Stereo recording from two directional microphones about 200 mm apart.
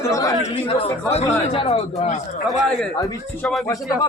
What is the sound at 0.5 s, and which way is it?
A man's voice, 30° left (ahead or behind).